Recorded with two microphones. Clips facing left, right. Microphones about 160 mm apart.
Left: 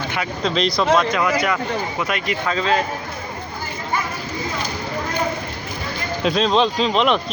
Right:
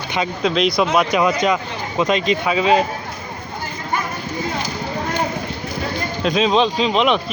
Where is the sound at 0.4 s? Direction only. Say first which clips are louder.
Right 2 dB; 5° right (ahead or behind).